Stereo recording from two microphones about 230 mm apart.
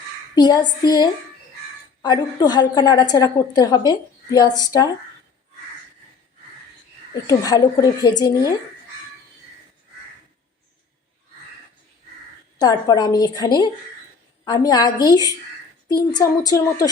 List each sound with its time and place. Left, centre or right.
0.3 s a woman's voice: centre
7.3 s a woman's voice: centre
12.5 s a woman's voice: centre